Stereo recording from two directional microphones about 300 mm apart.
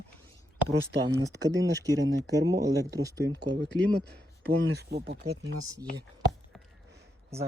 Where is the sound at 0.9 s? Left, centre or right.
Right.